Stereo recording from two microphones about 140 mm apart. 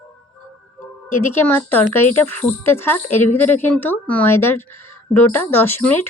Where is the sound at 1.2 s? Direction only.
15° left (ahead or behind).